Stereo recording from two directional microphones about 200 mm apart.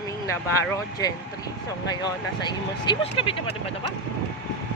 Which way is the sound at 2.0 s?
20° left (ahead or behind).